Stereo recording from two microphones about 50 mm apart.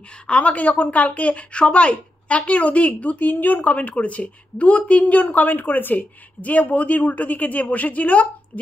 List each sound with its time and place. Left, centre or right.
0.3 s a woman's voice: left